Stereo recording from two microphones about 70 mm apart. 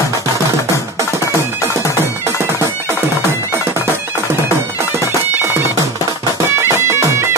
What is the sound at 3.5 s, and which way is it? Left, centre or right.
Bagpipes, right.